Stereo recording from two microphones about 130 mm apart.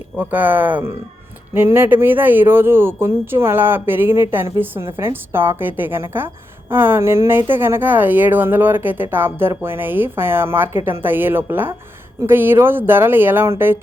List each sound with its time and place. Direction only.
0.2 s speech: 15° right (ahead or behind)